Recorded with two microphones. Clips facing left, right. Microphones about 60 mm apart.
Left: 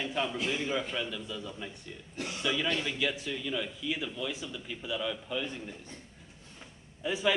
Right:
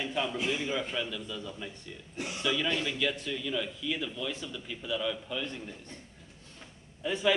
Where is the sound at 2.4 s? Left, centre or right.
Centre.